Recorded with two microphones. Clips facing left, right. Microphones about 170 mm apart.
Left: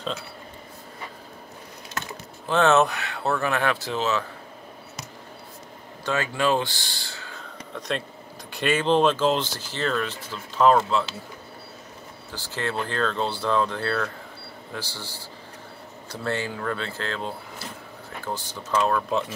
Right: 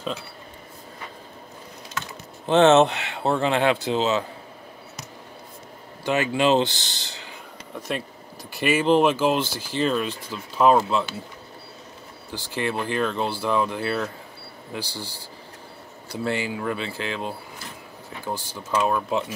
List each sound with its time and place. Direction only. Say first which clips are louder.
2.4 s speech: right 4 dB; 20° right (ahead or behind)
6.0 s speech: right 3 dB; 20° right (ahead or behind)
12.3 s speech: right 3 dB; 15° right (ahead or behind)
16.1 s speech: right 2 dB; 15° right (ahead or behind)